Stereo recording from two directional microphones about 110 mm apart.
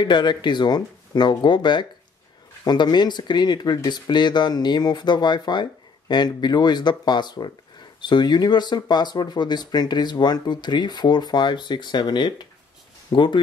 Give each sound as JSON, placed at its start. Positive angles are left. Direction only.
{"t": 0.0, "sound": "speech", "side_deg": 45}